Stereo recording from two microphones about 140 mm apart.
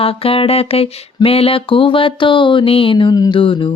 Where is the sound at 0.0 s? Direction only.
45° left (ahead or behind).